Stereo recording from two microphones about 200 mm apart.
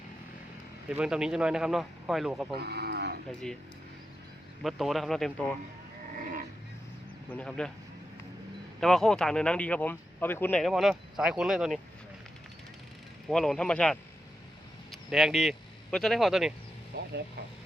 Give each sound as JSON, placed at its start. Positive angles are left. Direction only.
{"t": 0.9, "sound": "speech", "side_deg": -5}
{"t": 2.6, "sound": "livestock", "side_deg": -55}
{"t": 4.6, "sound": "speech", "side_deg": 0}
{"t": 7.3, "sound": "speech", "side_deg": 5}
{"t": 8.8, "sound": "speech", "side_deg": 0}
{"t": 13.2, "sound": "speech", "side_deg": 0}
{"t": 15.1, "sound": "speech", "side_deg": 0}
{"t": 16.9, "sound": "vehicle", "side_deg": -55}